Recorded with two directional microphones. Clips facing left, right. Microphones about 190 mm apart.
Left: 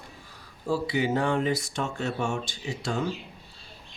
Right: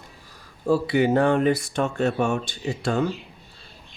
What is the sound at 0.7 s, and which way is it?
Speech, 60° right (ahead or behind).